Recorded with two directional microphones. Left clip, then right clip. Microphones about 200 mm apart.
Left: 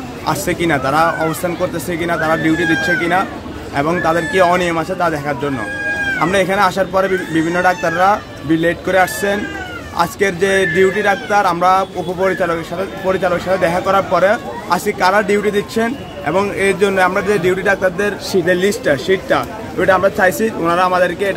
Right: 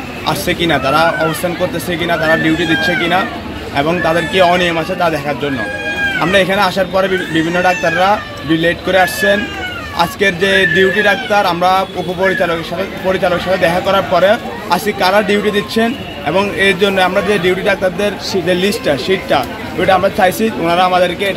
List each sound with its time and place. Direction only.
0.3 s a man's voice: 15° left (ahead or behind)